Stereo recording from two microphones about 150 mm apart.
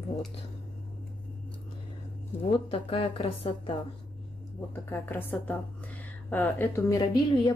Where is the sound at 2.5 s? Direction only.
35° left (ahead or behind).